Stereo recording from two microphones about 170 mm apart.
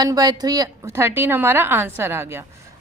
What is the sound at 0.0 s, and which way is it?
A woman's voice, 20° right (ahead or behind).